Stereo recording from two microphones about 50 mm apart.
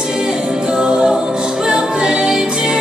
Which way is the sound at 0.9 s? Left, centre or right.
Centre.